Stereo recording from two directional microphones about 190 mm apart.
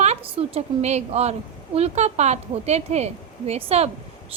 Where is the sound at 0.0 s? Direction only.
30° right (ahead or behind).